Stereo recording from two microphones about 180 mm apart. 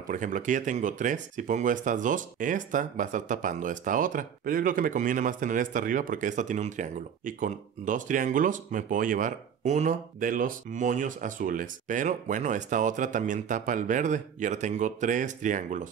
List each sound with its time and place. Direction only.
0.1 s speech: 45° right (ahead or behind)